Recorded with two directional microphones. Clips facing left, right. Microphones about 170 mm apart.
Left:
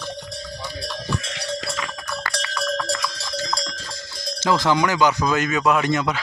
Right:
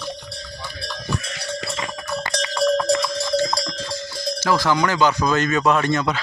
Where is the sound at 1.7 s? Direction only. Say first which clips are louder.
Right 3 dB; 25° right (ahead or behind).